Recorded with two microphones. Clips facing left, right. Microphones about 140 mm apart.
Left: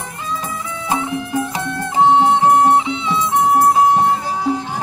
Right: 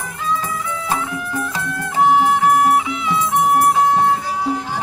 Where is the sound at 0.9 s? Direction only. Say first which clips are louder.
Left 5 dB; 20° left (ahead or behind).